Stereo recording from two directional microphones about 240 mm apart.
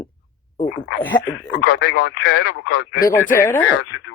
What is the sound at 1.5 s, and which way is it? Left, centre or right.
Speech, left.